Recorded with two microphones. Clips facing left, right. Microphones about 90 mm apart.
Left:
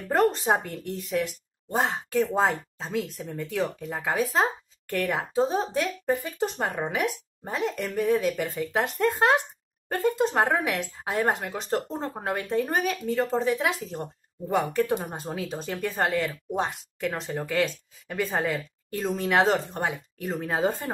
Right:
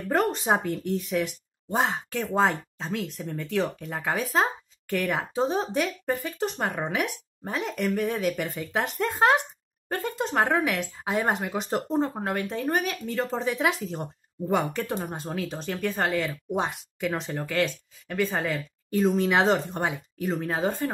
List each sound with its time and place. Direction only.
0.1 s a woman's voice: centre (ahead or behind)